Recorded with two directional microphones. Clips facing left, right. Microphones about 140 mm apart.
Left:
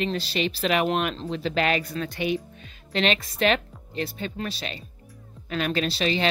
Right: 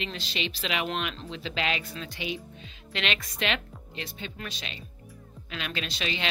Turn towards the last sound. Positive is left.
turn(degrees=35)  # may be behind; listen again after turning